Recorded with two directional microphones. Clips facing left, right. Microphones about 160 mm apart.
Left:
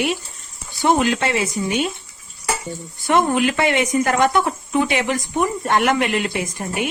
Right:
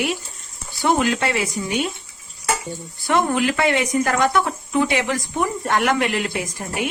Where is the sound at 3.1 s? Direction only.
20° left (ahead or behind).